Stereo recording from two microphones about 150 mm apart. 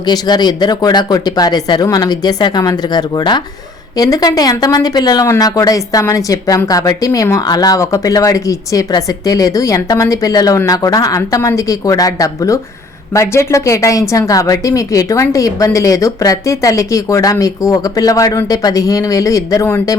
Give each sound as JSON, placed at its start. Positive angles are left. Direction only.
{"t": 0.0, "sound": "speech", "side_deg": 25}